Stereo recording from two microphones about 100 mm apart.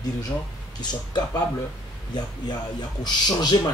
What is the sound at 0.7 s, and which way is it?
Speech, 45° left (ahead or behind).